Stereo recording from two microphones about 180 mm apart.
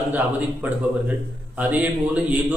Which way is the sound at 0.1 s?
10° right (ahead or behind).